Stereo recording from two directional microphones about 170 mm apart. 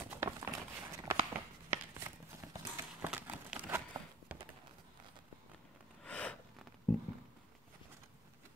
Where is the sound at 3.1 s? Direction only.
5° right (ahead or behind).